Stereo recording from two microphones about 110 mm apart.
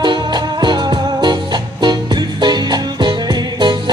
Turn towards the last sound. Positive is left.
turn(degrees=-40)  # may be behind; listen again after turning